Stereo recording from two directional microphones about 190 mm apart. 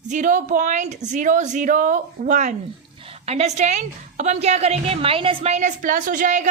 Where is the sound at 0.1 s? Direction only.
40° right (ahead or behind).